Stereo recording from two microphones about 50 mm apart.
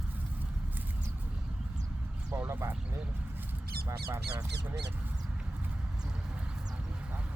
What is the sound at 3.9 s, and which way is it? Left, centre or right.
Speech, right.